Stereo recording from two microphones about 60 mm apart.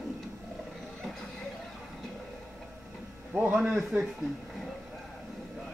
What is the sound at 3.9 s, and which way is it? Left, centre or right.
Speech, right.